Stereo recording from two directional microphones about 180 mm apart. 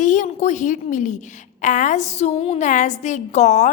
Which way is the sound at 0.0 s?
45° left (ahead or behind).